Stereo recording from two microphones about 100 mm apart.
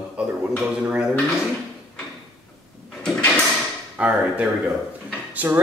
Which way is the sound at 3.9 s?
10° right (ahead or behind).